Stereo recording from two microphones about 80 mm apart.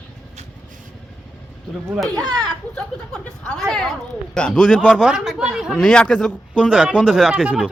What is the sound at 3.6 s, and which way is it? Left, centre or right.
A man's voice, centre.